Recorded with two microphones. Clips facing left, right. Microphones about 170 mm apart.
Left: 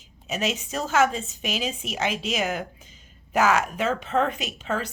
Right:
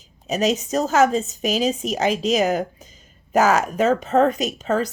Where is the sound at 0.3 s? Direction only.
40° right (ahead or behind).